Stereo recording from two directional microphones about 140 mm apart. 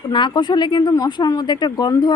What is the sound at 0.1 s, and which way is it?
Speech, 35° left (ahead or behind).